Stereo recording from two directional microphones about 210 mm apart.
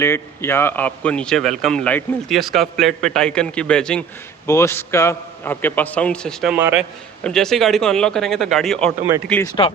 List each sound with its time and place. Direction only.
0.0 s a man's voice: 10° left (ahead or behind)
9.6 s speech: 20° left (ahead or behind)